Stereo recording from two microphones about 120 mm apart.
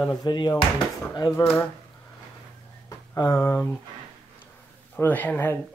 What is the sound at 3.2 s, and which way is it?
Speech, 25° left (ahead or behind).